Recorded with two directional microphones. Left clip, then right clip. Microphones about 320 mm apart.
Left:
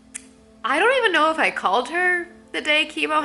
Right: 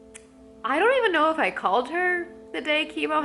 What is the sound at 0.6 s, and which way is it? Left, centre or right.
A woman's voice, centre.